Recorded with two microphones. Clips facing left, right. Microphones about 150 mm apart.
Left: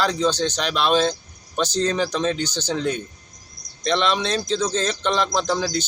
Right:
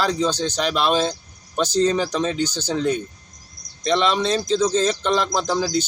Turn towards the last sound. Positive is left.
turn(degrees=-5)  # may be behind; listen again after turning